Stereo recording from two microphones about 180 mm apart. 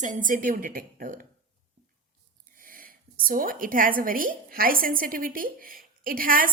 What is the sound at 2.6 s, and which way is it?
A woman's voice, 50° right (ahead or behind).